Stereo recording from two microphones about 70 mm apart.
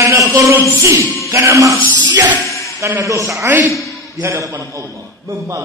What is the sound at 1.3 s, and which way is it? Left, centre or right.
Speech, right.